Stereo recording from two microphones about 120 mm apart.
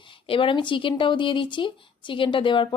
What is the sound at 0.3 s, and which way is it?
Speech, 45° left (ahead or behind).